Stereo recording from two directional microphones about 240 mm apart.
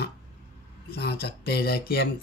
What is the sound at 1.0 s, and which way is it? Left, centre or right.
Speech, left.